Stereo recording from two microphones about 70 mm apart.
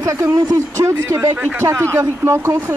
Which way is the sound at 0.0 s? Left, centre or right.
Right.